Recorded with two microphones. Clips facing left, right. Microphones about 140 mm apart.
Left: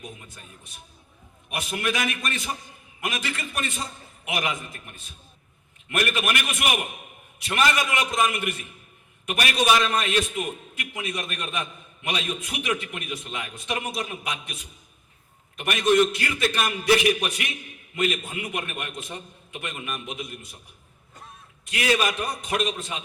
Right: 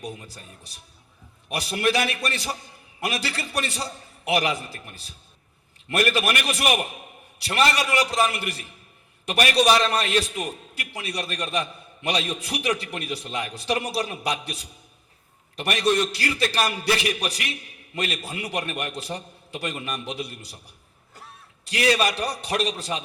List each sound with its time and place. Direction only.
0.0 s a man's voice: 35° right (ahead or behind)
21.7 s a man's voice: 35° right (ahead or behind)